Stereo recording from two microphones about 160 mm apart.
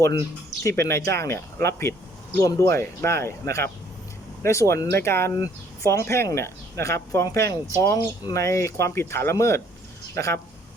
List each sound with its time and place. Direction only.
0.0 s speech: 20° left (ahead or behind)